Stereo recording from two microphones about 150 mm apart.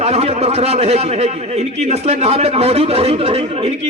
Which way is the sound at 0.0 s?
45° right (ahead or behind).